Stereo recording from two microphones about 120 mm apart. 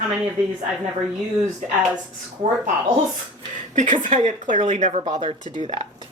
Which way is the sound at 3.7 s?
90° right.